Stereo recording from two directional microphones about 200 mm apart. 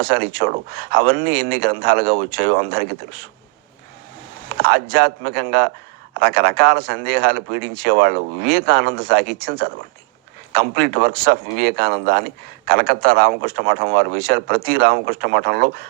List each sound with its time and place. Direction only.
0.0 s speech: 50° right (ahead or behind)
4.6 s speech: 50° right (ahead or behind)